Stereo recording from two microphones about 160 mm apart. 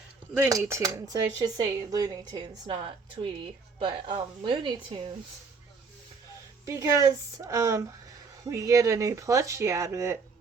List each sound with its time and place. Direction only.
0.3 s speech: 15° right (ahead or behind)
6.7 s speech: 20° right (ahead or behind)